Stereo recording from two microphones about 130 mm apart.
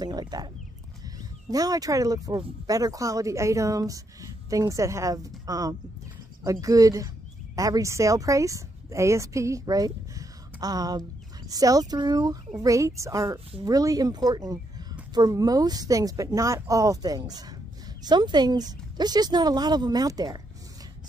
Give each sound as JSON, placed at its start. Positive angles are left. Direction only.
{"t": 0.0, "sound": "a woman's voice", "side_deg": -30}